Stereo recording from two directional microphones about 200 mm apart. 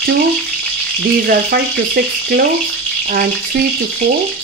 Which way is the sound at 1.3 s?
50° right (ahead or behind).